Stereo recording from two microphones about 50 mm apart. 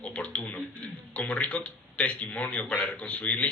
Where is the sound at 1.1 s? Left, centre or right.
Left.